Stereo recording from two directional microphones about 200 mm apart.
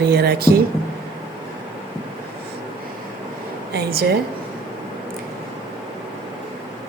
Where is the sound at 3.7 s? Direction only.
50° right (ahead or behind).